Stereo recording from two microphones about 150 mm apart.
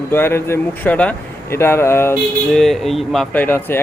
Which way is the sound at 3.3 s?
10° left (ahead or behind).